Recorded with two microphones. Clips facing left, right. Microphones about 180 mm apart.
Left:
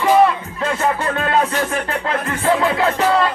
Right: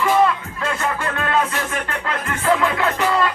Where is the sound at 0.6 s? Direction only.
30° left (ahead or behind).